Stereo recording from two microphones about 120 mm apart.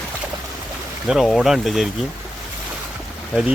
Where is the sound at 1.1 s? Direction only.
5° right (ahead or behind).